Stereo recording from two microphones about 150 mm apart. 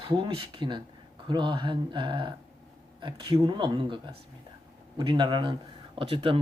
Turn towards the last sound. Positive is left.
turn(degrees=-35)  # may be behind; listen again after turning